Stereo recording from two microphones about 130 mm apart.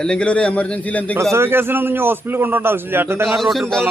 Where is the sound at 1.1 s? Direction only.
20° right (ahead or behind).